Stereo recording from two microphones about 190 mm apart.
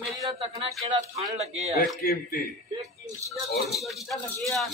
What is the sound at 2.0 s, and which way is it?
Speech, 55° left (ahead or behind).